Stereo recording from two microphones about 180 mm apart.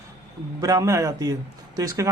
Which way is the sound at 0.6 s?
20° right (ahead or behind).